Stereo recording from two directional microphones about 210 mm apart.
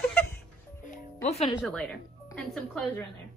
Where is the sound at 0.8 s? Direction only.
35° left (ahead or behind).